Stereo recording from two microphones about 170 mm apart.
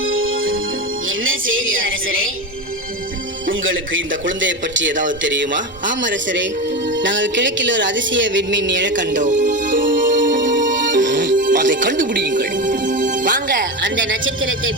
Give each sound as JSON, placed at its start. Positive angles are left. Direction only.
{"t": 4.1, "sound": "a man's voice", "side_deg": -90}
{"t": 9.1, "sound": "music", "side_deg": -50}
{"t": 9.7, "sound": "music", "side_deg": -90}
{"t": 11.2, "sound": "music", "side_deg": -50}
{"t": 13.8, "sound": "a man's voice", "side_deg": -90}